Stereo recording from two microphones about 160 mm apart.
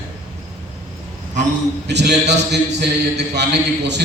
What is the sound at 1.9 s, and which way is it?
Speech, 90° right.